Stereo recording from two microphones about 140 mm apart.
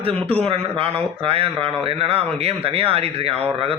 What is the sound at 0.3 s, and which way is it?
A man's voice, 45° right (ahead or behind).